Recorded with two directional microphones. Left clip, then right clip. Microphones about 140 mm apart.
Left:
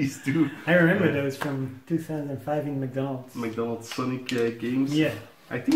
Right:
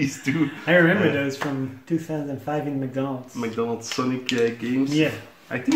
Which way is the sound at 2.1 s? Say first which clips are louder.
Right 2 dB; 10° left (ahead or behind).